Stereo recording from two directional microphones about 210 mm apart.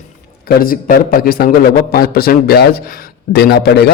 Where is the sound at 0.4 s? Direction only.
45° left (ahead or behind).